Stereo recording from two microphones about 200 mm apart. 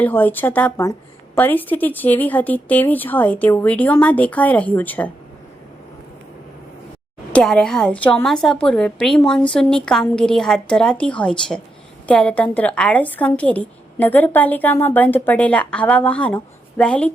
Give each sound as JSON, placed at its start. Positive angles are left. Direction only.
{"t": 0.0, "sound": "a woman's voice", "side_deg": 10}
{"t": 7.3, "sound": "a woman's voice", "side_deg": 5}